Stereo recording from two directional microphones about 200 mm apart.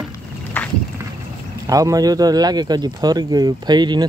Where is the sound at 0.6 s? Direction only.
10° left (ahead or behind).